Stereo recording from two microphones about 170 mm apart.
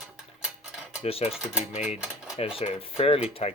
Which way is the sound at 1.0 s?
35° left (ahead or behind).